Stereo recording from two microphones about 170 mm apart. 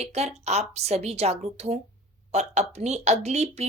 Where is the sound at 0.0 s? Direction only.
40° right (ahead or behind).